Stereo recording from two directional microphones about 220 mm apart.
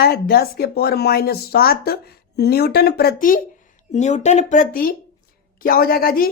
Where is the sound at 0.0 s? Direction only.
45° left (ahead or behind).